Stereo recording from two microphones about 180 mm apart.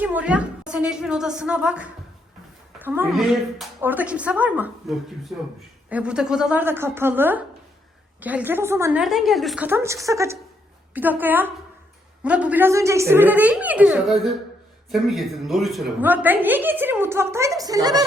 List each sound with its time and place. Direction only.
0.0 s a woman's voice: 10° right (ahead or behind)
9.6 s a woman's voice: 15° right (ahead or behind)